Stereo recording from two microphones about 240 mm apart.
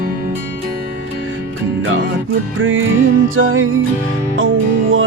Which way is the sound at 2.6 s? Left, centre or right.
Right.